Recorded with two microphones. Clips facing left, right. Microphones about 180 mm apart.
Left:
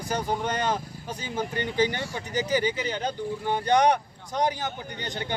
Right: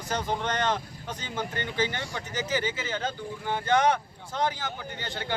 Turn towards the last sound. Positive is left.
turn(degrees=20)  # may be behind; listen again after turning